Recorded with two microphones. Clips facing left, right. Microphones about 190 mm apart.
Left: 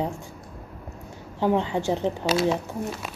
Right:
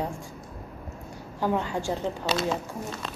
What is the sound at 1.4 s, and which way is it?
Speech, 20° left (ahead or behind).